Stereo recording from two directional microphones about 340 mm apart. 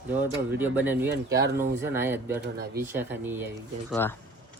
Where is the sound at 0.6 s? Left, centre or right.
Centre.